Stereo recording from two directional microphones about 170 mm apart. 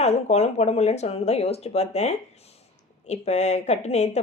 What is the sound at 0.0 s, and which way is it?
A woman's voice, 40° left (ahead or behind).